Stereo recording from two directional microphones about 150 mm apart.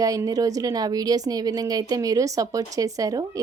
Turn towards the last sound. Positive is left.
turn(degrees=-25)  # may be behind; listen again after turning